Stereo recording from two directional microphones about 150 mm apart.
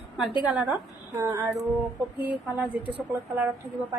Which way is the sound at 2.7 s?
10° right (ahead or behind).